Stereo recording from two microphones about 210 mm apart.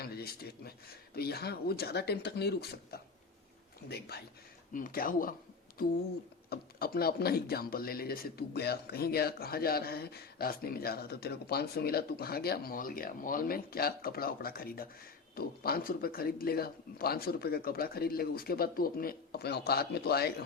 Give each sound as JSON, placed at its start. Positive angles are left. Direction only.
{"t": 0.0, "sound": "a man's voice", "side_deg": 50}
{"t": 6.5, "sound": "speech", "side_deg": 45}